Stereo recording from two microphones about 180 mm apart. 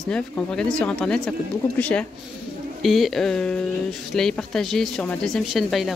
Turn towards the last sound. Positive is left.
turn(degrees=0)  # may be behind; listen again after turning